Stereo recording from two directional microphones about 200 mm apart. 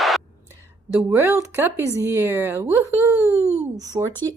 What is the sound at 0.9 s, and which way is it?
A woman's voice, 10° right (ahead or behind).